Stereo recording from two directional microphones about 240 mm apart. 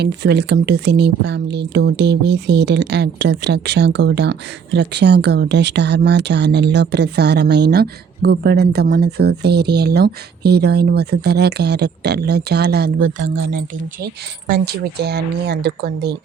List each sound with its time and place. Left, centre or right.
0.0 s speech: right